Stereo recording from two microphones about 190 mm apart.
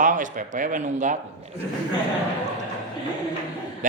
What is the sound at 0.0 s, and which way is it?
A woman's voice, 40° right (ahead or behind).